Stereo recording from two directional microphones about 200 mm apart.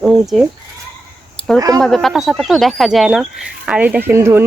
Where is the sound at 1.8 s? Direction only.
Centre (ahead or behind).